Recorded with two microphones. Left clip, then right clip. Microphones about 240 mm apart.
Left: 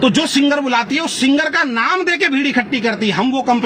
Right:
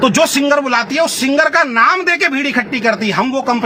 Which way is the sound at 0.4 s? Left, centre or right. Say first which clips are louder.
Right 2 dB; right.